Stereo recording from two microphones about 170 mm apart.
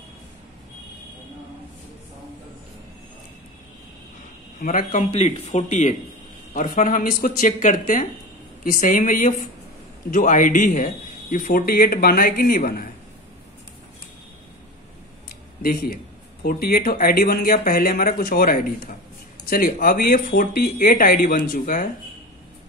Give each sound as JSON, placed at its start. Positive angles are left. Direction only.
{"t": 4.6, "sound": "a man's voice", "side_deg": 50}
{"t": 15.2, "sound": "a sound", "side_deg": 60}
{"t": 16.4, "sound": "a man's voice", "side_deg": 65}